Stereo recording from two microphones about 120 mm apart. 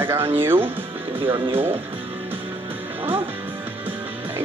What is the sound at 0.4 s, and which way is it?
Speech, 20° right (ahead or behind).